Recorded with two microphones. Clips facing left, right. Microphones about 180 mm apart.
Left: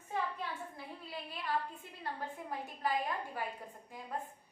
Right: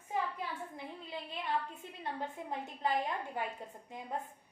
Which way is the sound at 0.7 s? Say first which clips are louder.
Right 2 dB; 20° right (ahead or behind).